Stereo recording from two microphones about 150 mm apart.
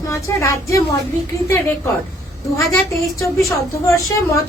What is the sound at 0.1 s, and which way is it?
Speech, 20° left (ahead or behind).